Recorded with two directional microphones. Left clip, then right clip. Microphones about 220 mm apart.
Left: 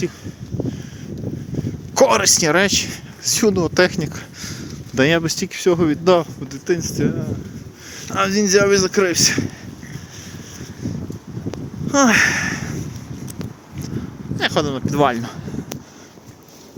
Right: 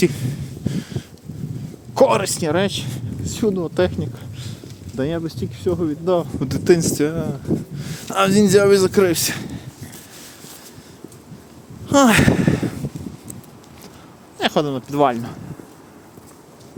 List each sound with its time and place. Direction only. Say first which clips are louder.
2.0 s speech: left 2 dB; 5° right (ahead or behind); by 6.2 s 10° left (ahead or behind)
6.4 s speech: right 6 dB; 30° right (ahead or behind)
11.9 s a sound: even; 25° right (ahead or behind)
14.3 s speech: even; 10° right (ahead or behind)